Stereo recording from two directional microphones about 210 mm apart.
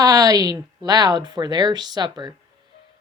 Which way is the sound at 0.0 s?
15° right (ahead or behind).